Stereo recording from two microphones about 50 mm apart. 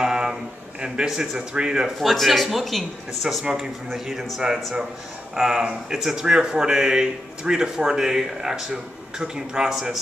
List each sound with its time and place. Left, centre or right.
0.0 s a sound: centre
1.5 s speech: centre
2.0 s speech: centre